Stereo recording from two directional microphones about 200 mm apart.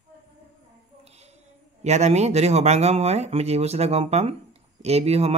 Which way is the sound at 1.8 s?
35° right (ahead or behind).